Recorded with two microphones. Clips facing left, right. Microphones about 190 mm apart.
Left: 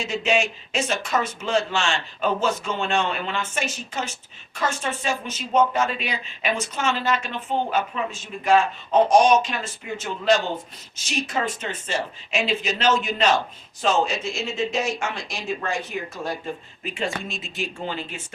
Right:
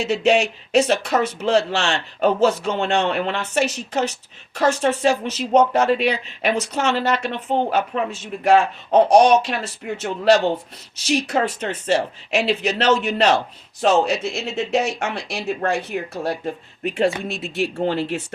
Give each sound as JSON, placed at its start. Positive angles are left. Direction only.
{"t": 0.0, "sound": "speech", "side_deg": -70}